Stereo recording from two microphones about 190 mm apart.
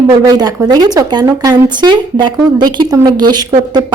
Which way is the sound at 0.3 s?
20° right (ahead or behind).